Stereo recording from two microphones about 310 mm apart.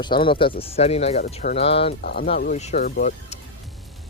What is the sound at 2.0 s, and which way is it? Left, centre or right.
Speech, left.